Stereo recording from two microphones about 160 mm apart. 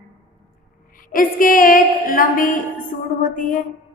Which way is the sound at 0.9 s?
60° left (ahead or behind).